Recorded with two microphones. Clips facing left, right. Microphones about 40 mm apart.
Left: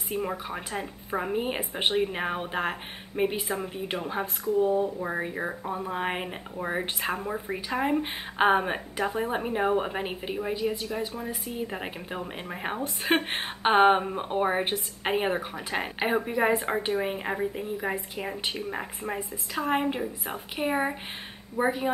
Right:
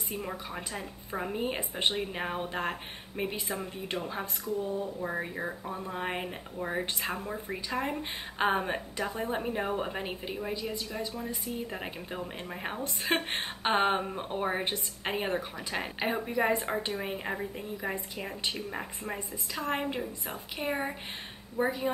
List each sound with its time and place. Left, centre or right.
0.2 s speech: centre
4.6 s speech: left
5.0 s speech: centre